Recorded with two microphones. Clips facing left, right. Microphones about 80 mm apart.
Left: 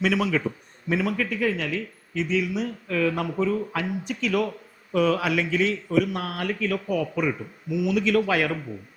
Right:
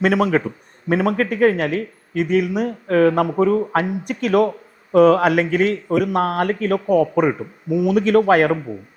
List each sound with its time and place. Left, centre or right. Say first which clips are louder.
0.0 s speech: right 6 dB; right